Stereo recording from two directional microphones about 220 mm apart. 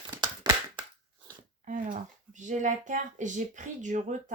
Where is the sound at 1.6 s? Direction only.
35° right (ahead or behind).